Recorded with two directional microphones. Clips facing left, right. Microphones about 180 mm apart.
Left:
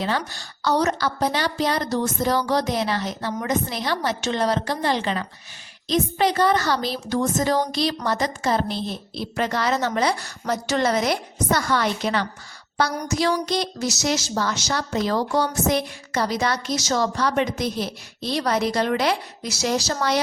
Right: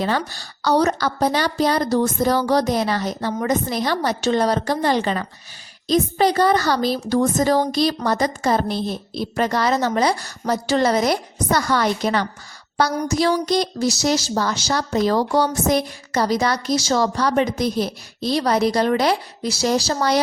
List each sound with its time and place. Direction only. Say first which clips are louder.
0.0 s a woman's voice: right 3 dB; 40° right (ahead or behind)